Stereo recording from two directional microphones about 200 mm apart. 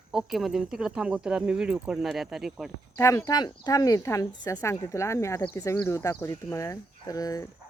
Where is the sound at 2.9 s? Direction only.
15° left (ahead or behind).